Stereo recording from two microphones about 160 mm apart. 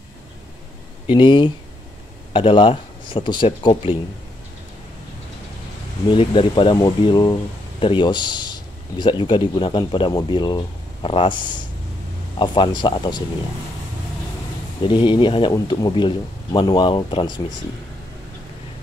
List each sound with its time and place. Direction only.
1.0 s speech: 30° left (ahead or behind)
6.0 s speech: 30° left (ahead or behind)
14.9 s speech: 30° left (ahead or behind)